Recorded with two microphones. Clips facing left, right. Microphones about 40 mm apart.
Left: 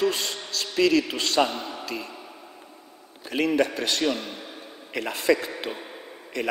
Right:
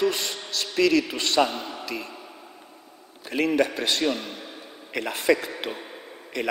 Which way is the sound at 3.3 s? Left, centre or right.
Right.